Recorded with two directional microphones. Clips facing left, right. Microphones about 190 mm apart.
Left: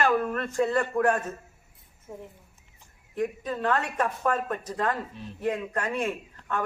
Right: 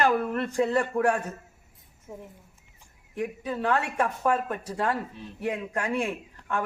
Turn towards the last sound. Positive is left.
turn(degrees=-10)  # may be behind; listen again after turning